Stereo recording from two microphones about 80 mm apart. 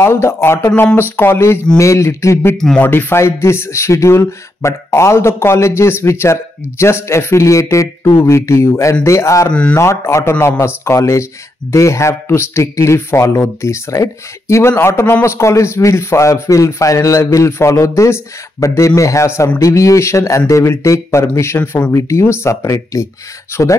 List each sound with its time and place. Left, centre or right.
0.0 s speech: left
2.5 s speech: centre
2.8 s speech: left
9.5 s speech: centre
9.8 s speech: left